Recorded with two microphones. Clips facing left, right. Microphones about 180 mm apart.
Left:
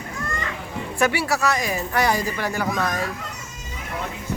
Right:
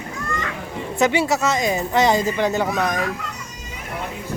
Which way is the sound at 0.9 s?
20° right (ahead or behind).